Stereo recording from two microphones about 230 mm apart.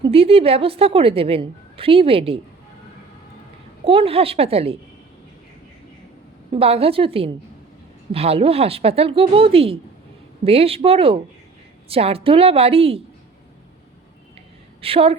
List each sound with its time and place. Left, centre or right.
0.0 s speech: right
3.8 s speech: right
6.5 s speech: right
14.8 s a woman's voice: right